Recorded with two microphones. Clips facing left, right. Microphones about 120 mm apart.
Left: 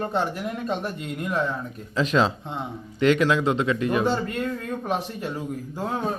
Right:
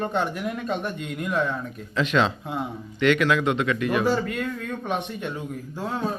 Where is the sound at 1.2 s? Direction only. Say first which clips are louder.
Right 1 dB; centre (ahead or behind).